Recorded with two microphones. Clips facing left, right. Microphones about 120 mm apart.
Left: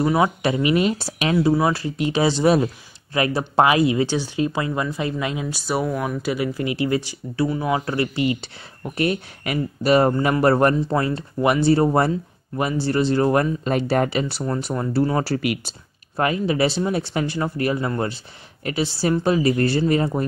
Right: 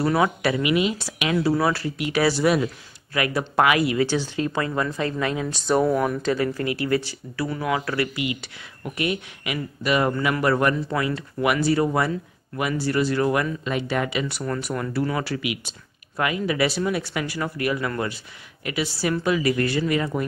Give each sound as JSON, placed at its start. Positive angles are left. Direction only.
{"t": 0.0, "sound": "speech", "side_deg": 20}
{"t": 1.4, "sound": "speech", "side_deg": 20}
{"t": 5.5, "sound": "speech", "side_deg": 5}
{"t": 6.3, "sound": "speech", "side_deg": 15}
{"t": 14.4, "sound": "speech", "side_deg": 25}